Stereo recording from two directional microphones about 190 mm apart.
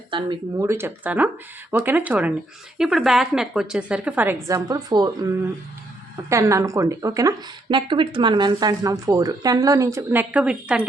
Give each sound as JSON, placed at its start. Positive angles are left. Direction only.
{"t": 0.1, "sound": "speech", "side_deg": -25}
{"t": 0.7, "sound": "a woman's voice", "side_deg": -10}
{"t": 6.2, "sound": "a woman's voice", "side_deg": -15}